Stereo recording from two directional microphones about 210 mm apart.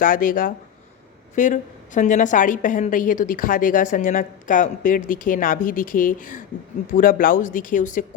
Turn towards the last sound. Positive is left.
turn(degrees=40)  # may be behind; listen again after turning